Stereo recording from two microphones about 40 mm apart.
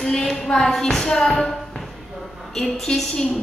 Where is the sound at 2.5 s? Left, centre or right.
Centre.